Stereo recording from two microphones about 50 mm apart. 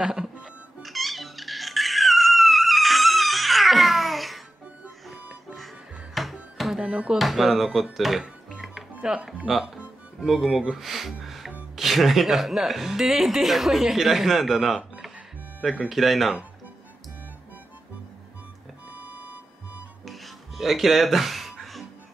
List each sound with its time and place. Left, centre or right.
0.0 s music: centre
0.8 s music: centre
6.2 s music: centre
6.8 s speech: centre
7.2 s speech: centre
9.1 s speech: right
10.2 s a woman's voice: centre
15.9 s a woman's voice: centre
18.9 s music: right
20.1 s music: centre